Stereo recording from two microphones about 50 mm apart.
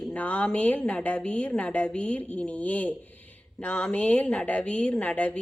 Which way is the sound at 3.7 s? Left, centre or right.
Left.